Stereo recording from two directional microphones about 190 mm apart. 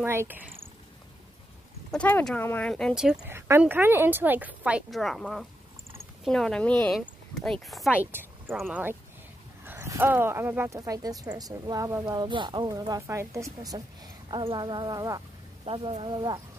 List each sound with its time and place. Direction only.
0.0 s speech: 10° right (ahead or behind)
1.9 s speech: 10° left (ahead or behind)
8.1 s a sound: 10° right (ahead or behind)
8.5 s speech: centre (ahead or behind)
9.7 s speech: 10° right (ahead or behind)
15.6 s speech: 30° right (ahead or behind)